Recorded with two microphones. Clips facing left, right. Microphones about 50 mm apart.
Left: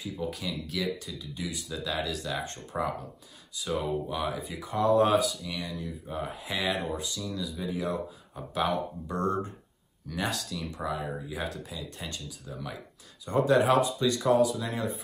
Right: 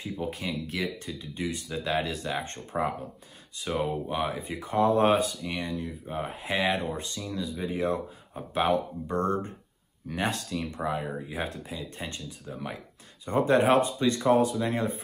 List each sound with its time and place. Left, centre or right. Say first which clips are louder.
0.0 s speech: right 1 dB; right